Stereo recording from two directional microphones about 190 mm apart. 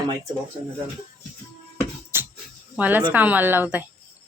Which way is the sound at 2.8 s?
10° right (ahead or behind).